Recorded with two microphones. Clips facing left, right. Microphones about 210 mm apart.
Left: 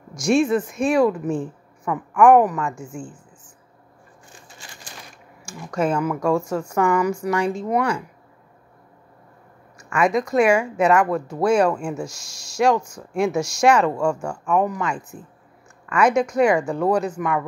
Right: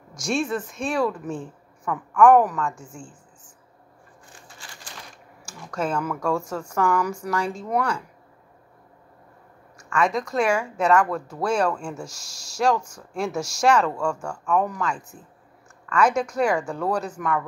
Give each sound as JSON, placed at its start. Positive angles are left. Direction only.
{"t": 0.1, "sound": "speech", "side_deg": 0}
{"t": 0.6, "sound": "a woman's voice", "side_deg": 15}
{"t": 5.9, "sound": "a woman's voice", "side_deg": 10}
{"t": 9.8, "sound": "a woman's voice", "side_deg": 5}
{"t": 11.1, "sound": "a woman's voice", "side_deg": 15}
{"t": 13.9, "sound": "a woman's voice", "side_deg": 10}
{"t": 16.1, "sound": "a woman's voice", "side_deg": -5}
{"t": 16.5, "sound": "a woman's voice", "side_deg": 10}